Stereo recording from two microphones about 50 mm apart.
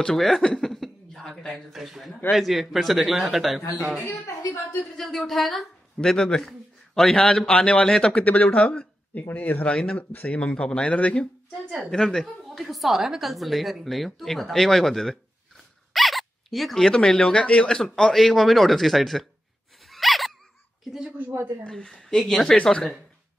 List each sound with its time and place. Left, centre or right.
0.0 s chuckle: centre
1.5 s speech: centre
4.9 s speech: centre
5.9 s a man's voice: centre
9.1 s speech: left
9.8 s a man's voice: centre
11.9 s speech: centre
12.4 s speech: centre
19.9 s gasp: centre
21.6 s speech: centre
22.6 s a man's voice: centre